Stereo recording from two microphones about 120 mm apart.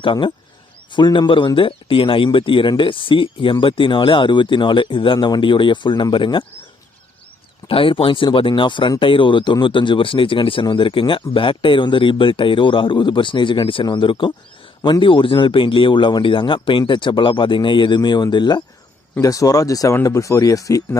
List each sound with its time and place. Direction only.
0.0 s speech: 45° left (ahead or behind)
7.7 s speech: 50° left (ahead or behind); by 20.8 s 30° left (ahead or behind)